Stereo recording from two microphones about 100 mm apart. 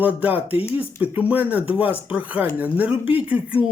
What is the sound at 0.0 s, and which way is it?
Speech, 15° right (ahead or behind).